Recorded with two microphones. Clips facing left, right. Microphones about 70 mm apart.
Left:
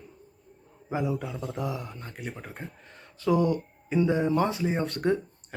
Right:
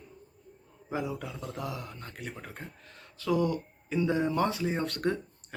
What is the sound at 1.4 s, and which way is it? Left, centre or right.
Speech, centre.